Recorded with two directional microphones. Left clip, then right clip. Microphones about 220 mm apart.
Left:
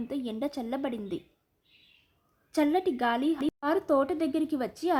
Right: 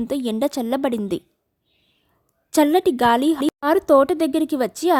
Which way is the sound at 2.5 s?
50° right (ahead or behind).